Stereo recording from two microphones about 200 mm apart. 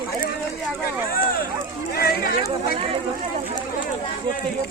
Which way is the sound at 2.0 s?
50° left (ahead or behind).